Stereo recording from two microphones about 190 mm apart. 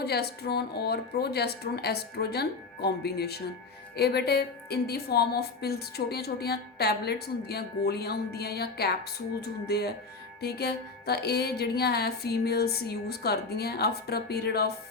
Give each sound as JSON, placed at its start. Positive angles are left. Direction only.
{"t": 0.0, "sound": "a woman's voice", "side_deg": 55}